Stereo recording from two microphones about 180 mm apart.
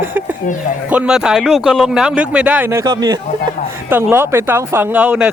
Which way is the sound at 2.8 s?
25° right (ahead or behind).